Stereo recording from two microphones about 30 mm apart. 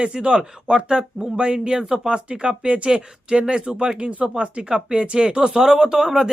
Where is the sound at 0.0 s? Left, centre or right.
Right.